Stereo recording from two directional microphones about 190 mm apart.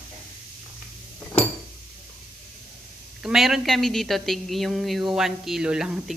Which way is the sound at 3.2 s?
Centre (ahead or behind).